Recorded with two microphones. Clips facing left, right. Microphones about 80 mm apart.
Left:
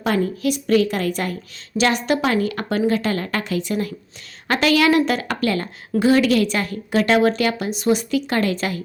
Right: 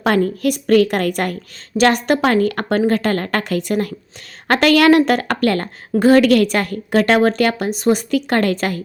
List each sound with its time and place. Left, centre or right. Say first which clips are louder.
0.0 s a woman's voice: right 4 dB; right
1.8 s a woman's voice: right 4 dB; right